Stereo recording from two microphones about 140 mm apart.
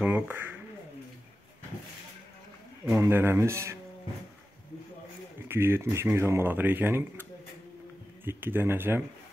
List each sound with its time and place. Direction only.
0.0 s speech: 10° right (ahead or behind)
2.9 s speech: 15° right (ahead or behind)
5.5 s speech: 15° right (ahead or behind)
8.3 s speech: 15° right (ahead or behind)